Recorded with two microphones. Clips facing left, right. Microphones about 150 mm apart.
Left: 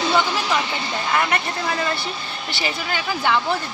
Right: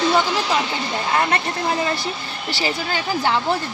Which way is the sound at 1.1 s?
25° right (ahead or behind).